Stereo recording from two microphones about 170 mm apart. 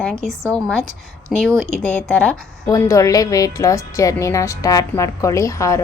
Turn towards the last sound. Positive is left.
turn(degrees=20)  # may be behind; listen again after turning